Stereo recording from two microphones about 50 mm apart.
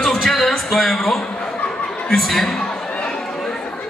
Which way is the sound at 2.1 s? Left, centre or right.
Centre.